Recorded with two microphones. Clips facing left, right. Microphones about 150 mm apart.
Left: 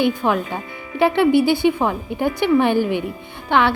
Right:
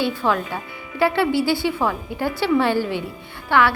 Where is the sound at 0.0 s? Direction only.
20° left (ahead or behind).